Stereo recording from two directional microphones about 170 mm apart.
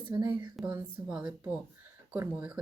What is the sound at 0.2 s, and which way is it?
Speech, 25° right (ahead or behind).